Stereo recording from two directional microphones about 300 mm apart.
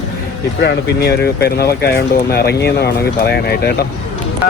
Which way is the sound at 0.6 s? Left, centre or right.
Left.